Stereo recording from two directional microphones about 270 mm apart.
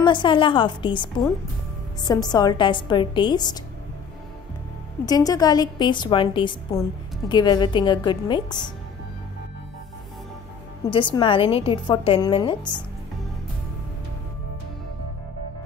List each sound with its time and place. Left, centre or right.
0.0 s a woman's voice: centre
5.0 s a woman's voice: centre
10.9 s a woman's voice: centre